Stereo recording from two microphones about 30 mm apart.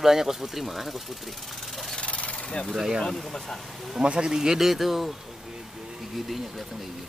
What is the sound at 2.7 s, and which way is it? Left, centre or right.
Speech, right.